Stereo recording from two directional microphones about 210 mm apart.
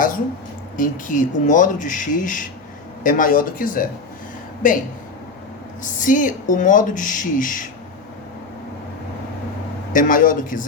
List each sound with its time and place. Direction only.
0.8 s speech: 40° left (ahead or behind)
5.8 s speech: 40° left (ahead or behind)
9.9 s speech: 40° left (ahead or behind)